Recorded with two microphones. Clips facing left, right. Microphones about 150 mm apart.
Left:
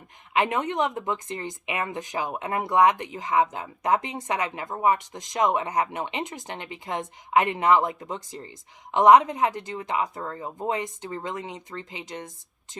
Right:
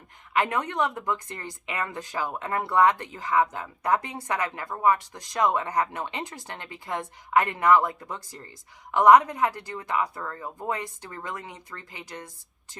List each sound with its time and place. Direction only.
0.3 s speech: 20° left (ahead or behind)